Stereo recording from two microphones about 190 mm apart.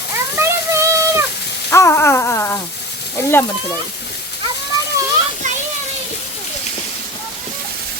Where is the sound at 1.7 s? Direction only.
15° left (ahead or behind).